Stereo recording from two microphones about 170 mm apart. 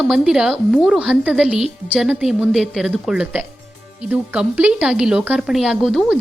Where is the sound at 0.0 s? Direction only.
5° right (ahead or behind).